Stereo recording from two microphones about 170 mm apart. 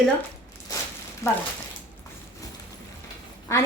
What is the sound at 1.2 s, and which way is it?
Speech, 20° left (ahead or behind).